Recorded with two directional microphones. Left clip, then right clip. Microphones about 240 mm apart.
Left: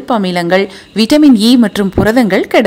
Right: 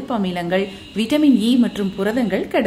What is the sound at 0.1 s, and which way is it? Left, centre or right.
A woman's voice, left.